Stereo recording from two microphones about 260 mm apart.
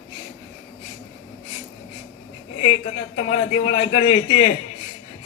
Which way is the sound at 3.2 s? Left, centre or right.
Left.